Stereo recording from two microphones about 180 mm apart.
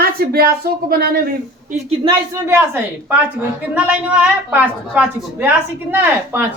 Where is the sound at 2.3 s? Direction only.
15° right (ahead or behind).